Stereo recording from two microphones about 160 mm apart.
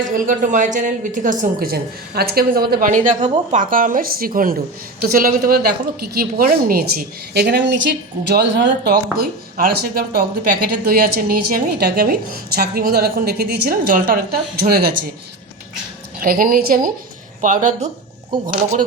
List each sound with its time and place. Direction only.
0.1 s a woman's voice: 55° right (ahead or behind)
16.2 s a woman's voice: 65° right (ahead or behind)
17.4 s a woman's voice: 50° right (ahead or behind)